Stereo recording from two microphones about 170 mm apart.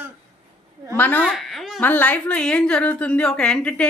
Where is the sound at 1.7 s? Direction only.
10° left (ahead or behind).